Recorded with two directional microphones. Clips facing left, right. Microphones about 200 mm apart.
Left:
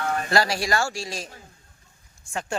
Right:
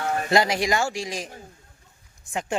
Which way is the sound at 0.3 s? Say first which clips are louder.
Right 3 dB; 20° right (ahead or behind).